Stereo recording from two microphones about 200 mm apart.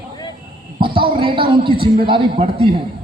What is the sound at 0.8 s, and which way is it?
A man's voice, 25° right (ahead or behind).